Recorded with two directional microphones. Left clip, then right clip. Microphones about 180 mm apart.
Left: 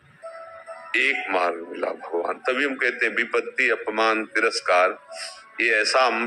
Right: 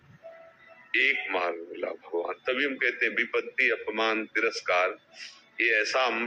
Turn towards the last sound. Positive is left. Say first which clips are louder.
# left 6 dB
turn(degrees=35)  # may be behind; listen again after turning